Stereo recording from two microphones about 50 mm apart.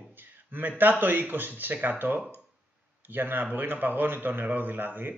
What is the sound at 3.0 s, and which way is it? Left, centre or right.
Speech, right.